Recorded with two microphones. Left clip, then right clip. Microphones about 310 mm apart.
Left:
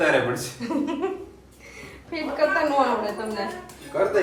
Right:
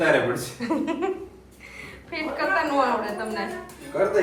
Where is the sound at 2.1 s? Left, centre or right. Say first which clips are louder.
Left 2 dB; centre.